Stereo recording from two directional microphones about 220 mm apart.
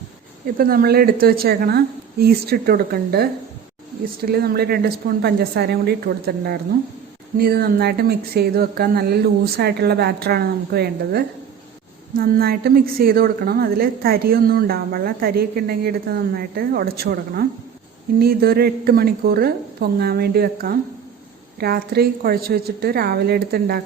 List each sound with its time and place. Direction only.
0.4 s a woman's voice: 40° right (ahead or behind)
4.3 s a woman's voice: 45° right (ahead or behind)